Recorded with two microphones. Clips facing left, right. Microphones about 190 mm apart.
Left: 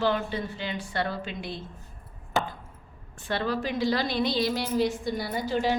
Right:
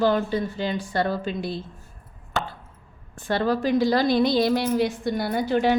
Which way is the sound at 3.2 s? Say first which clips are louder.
Right 6 dB; 40° right (ahead or behind).